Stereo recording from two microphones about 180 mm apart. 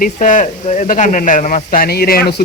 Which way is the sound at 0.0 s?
45° left (ahead or behind).